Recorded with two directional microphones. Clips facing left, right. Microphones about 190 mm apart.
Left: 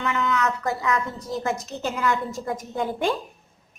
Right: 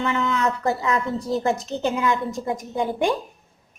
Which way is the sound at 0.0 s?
30° right (ahead or behind).